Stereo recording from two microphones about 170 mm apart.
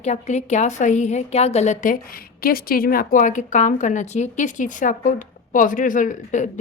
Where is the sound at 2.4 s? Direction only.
60° left (ahead or behind).